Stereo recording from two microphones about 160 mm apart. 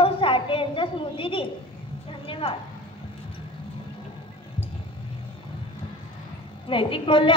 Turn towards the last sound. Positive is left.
turn(degrees=35)  # may be behind; listen again after turning